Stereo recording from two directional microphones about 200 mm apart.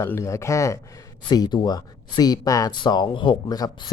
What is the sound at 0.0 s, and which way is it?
Speech, 15° left (ahead or behind).